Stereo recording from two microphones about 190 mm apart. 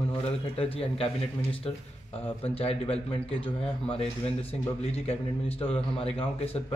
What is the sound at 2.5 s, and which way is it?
Speech, 30° left (ahead or behind).